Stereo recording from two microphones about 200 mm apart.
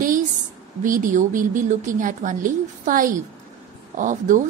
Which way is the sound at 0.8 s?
40° right (ahead or behind).